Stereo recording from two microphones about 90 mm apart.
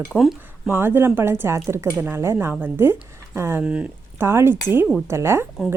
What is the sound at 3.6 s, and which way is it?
Speech, 15° right (ahead or behind).